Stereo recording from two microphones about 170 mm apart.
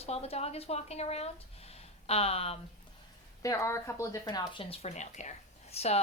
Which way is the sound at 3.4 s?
15° left (ahead or behind).